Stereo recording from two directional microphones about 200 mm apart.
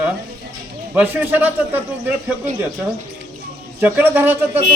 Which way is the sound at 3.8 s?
10° right (ahead or behind).